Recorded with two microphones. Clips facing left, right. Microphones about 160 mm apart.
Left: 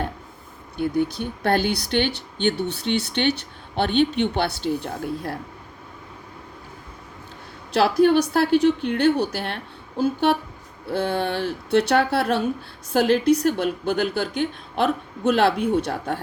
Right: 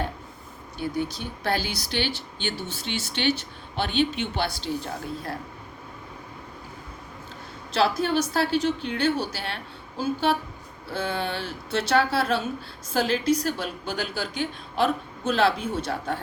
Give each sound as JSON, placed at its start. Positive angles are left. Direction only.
{"t": 0.8, "sound": "speech", "side_deg": 55}
{"t": 7.7, "sound": "speech", "side_deg": 60}